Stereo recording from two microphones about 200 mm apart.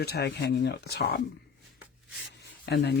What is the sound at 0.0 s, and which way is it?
Speech, 55° left (ahead or behind).